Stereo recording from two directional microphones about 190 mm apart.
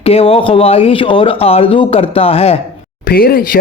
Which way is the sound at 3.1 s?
50° left (ahead or behind).